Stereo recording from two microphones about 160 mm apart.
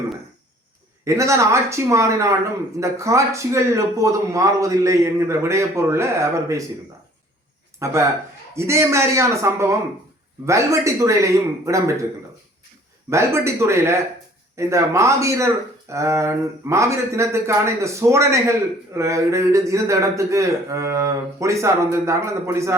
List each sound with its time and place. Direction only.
1.0 s a man's voice: 20° right (ahead or behind)
7.8 s a man's voice: 20° right (ahead or behind)
13.1 s a man's voice: 15° right (ahead or behind)